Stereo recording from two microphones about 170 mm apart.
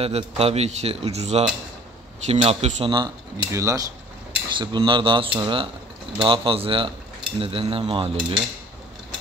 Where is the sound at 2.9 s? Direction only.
20° right (ahead or behind).